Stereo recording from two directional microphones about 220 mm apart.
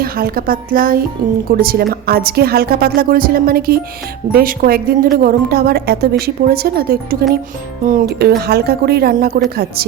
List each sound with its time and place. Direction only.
0.0 s a woman's voice: 45° right (ahead or behind)